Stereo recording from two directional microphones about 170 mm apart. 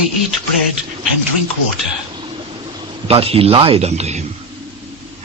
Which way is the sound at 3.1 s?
35° right (ahead or behind).